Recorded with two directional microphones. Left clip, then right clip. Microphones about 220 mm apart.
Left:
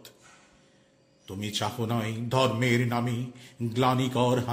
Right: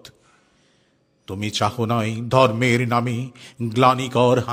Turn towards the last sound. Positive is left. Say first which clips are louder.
# right 8 dB
turn(degrees=-50)  # may be behind; listen again after turning